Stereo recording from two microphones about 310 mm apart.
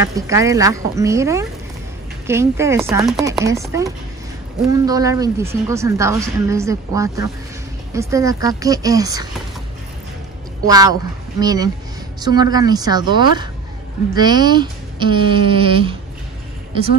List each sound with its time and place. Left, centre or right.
0.0 s a woman's voice: centre
10.6 s a woman's voice: centre